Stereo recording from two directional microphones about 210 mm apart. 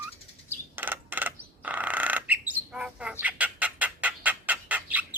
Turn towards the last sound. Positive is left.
turn(degrees=-10)  # may be behind; listen again after turning